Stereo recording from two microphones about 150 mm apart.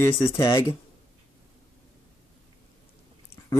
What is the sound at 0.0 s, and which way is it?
Speech, 20° left (ahead or behind).